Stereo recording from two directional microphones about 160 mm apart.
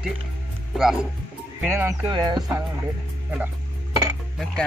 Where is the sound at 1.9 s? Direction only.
25° right (ahead or behind).